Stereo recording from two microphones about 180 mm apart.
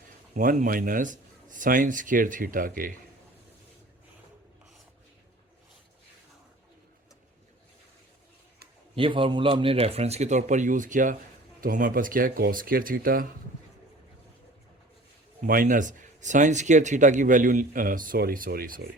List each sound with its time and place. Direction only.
0.3 s speech: 50° right (ahead or behind)
9.0 s speech: 30° right (ahead or behind); by 13.2 s 55° right (ahead or behind)
15.4 s speech: 50° right (ahead or behind)